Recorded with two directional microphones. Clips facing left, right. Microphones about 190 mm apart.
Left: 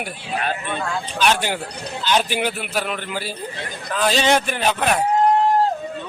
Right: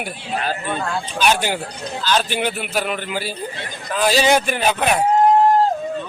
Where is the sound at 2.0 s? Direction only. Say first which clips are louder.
Even; 15° left (ahead or behind).